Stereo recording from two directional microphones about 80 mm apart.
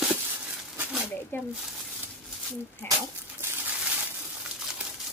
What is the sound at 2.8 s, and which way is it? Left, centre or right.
Speech, left.